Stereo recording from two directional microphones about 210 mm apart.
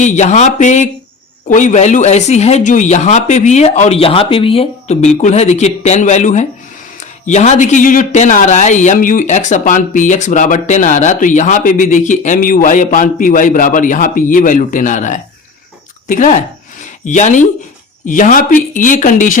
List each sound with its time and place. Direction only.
0.0 s speech: 35° left (ahead or behind)